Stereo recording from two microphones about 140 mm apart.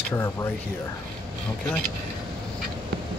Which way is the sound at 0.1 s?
20° left (ahead or behind).